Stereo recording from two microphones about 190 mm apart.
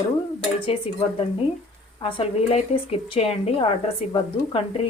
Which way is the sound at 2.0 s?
30° left (ahead or behind).